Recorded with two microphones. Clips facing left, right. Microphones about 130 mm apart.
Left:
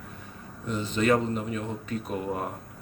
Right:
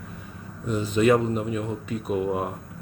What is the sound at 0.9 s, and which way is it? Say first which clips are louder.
Speech: right 4 dB; 10° right (ahead or behind).